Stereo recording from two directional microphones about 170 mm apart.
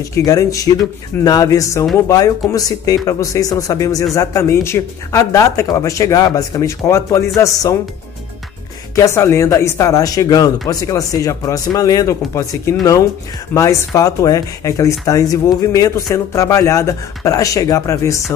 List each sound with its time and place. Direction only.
0.1 s speech: 20° left (ahead or behind)
8.9 s speech: 15° left (ahead or behind)
13.5 s speech: 20° left (ahead or behind)